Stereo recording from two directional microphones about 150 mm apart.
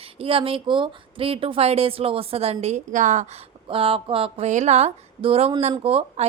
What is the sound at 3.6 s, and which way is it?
A woman's voice, 35° right (ahead or behind).